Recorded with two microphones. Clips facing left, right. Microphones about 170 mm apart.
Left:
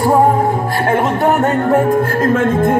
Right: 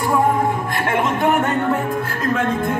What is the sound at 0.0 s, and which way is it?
Music, 35° left (ahead or behind).